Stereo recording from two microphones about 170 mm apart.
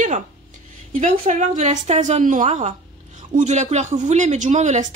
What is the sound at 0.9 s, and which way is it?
Speech, 45° right (ahead or behind).